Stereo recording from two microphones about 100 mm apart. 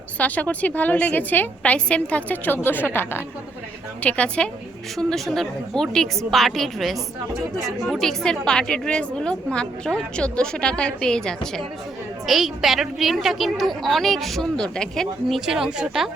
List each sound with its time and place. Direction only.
0.2 s a woman's voice: 15° left (ahead or behind)
4.0 s a woman's voice: 10° left (ahead or behind); by 16.0 s 5° right (ahead or behind)